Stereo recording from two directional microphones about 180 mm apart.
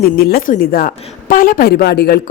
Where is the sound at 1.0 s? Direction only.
35° left (ahead or behind).